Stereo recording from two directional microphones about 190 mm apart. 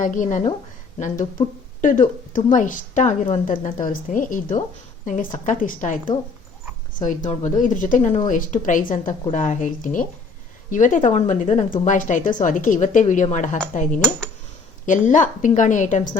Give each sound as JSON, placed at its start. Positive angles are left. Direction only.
{"t": 0.0, "sound": "a woman's voice", "side_deg": 40}
{"t": 7.0, "sound": "a woman's voice", "side_deg": 40}
{"t": 14.8, "sound": "a woman's voice", "side_deg": 40}